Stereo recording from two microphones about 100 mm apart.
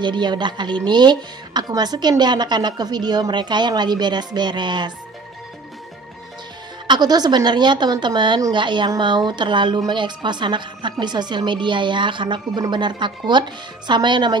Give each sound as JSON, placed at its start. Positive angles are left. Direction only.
{"t": 0.0, "sound": "speech", "side_deg": -50}
{"t": 6.9, "sound": "speech", "side_deg": -45}